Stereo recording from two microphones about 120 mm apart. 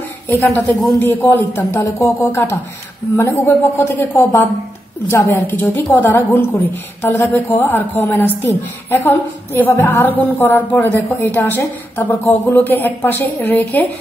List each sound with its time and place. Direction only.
0.3 s a woman's voice: 15° left (ahead or behind)